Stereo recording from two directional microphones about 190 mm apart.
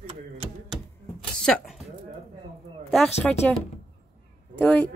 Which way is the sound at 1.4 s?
5° left (ahead or behind).